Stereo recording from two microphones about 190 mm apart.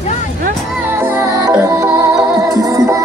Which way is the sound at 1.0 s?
10° right (ahead or behind).